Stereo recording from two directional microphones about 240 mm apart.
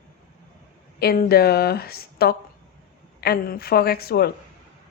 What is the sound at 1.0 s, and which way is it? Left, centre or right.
Speech, left.